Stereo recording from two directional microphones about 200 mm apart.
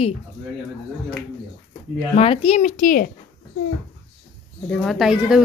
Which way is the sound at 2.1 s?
30° left (ahead or behind).